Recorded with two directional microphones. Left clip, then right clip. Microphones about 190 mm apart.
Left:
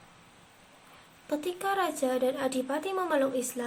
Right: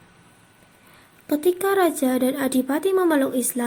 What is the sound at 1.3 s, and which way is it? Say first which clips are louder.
A woman's voice: right 10 dB; 25° right (ahead or behind).